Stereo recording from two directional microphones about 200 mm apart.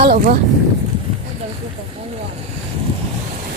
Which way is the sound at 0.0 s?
50° right (ahead or behind).